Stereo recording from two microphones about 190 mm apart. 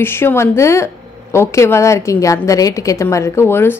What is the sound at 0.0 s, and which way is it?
A woman's voice, 10° left (ahead or behind).